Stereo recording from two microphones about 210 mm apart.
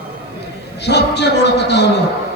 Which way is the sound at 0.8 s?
55° left (ahead or behind).